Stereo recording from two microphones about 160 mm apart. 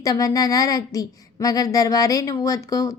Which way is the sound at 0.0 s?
20° left (ahead or behind).